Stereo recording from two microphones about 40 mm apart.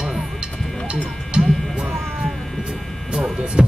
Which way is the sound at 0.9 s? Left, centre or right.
Centre.